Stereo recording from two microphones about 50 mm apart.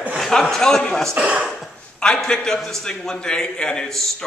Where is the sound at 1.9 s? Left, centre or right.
Centre.